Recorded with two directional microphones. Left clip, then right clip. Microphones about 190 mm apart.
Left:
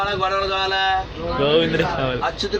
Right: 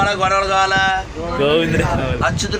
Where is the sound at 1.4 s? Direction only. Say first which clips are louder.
Right 2 dB; 15° right (ahead or behind).